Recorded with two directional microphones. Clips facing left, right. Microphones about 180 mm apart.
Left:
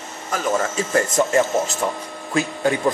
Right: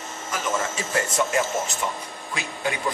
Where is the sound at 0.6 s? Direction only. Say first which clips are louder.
Left 7 dB; 40° left (ahead or behind).